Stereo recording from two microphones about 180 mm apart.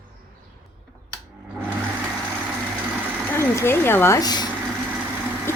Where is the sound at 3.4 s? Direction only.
15° left (ahead or behind).